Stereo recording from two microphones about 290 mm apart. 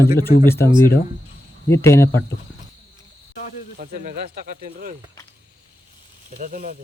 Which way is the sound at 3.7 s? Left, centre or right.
Right.